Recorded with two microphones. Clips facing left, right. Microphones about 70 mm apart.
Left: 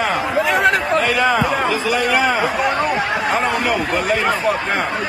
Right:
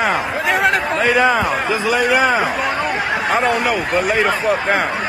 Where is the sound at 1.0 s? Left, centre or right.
Centre.